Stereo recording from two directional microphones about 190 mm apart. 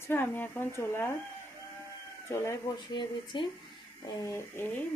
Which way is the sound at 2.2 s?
15° left (ahead or behind).